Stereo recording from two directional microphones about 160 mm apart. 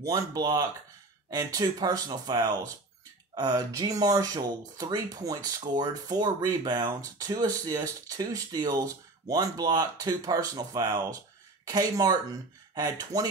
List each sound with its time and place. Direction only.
0.1 s speech: 25° right (ahead or behind)